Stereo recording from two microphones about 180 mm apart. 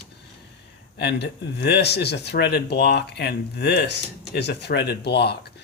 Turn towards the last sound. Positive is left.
turn(degrees=65)  # may be behind; listen again after turning